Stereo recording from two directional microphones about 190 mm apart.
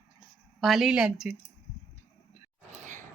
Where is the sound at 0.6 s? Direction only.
Centre (ahead or behind).